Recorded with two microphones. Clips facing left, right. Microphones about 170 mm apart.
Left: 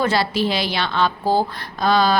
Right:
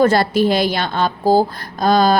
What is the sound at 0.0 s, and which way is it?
A woman's voice, 50° right (ahead or behind).